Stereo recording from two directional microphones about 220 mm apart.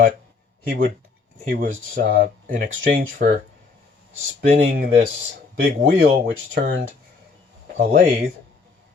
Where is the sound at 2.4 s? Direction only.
40° right (ahead or behind).